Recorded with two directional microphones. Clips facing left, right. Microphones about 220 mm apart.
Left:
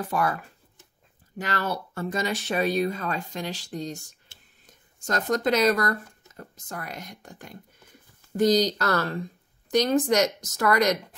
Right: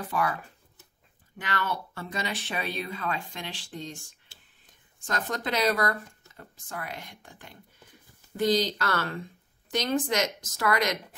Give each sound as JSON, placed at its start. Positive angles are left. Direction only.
{"t": 0.1, "sound": "speech", "side_deg": 45}
{"t": 1.4, "sound": "speech", "side_deg": 40}